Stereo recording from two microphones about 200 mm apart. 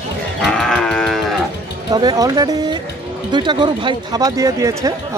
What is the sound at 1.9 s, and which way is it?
Speech, 20° right (ahead or behind).